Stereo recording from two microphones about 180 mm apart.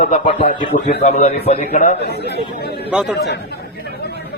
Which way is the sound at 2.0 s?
65° left (ahead or behind).